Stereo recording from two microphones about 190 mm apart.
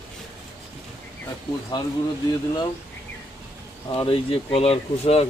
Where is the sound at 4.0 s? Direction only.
30° left (ahead or behind).